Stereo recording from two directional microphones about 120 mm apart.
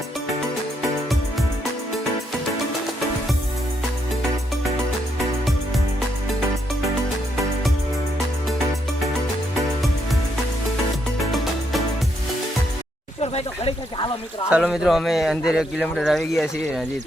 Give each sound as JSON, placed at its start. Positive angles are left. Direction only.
{"t": 11.2, "sound": "music", "side_deg": 0}
{"t": 13.2, "sound": "snake", "side_deg": 55}
{"t": 14.6, "sound": "speech", "side_deg": -5}